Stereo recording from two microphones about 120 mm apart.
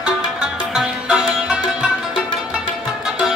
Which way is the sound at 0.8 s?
5° right (ahead or behind).